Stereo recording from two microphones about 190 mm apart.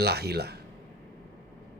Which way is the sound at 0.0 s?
60° right (ahead or behind).